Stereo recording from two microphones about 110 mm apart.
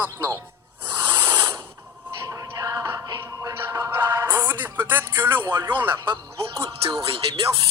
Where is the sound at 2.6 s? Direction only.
30° right (ahead or behind).